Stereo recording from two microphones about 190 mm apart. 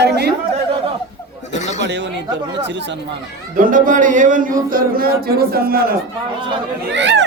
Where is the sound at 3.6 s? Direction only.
45° right (ahead or behind).